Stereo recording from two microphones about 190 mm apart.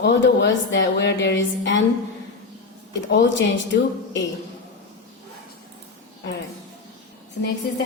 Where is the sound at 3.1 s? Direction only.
70° left (ahead or behind).